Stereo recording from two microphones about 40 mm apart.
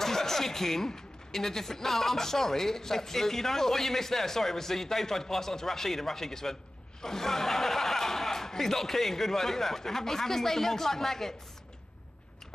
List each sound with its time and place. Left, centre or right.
0.0 s speech: centre